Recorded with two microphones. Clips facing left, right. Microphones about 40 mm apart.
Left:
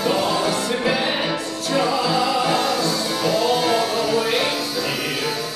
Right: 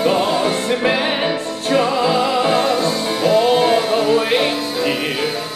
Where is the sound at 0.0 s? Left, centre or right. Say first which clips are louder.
Right 4 dB; right.